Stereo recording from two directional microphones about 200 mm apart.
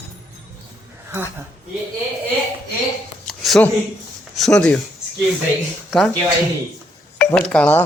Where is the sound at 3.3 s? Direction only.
5° left (ahead or behind).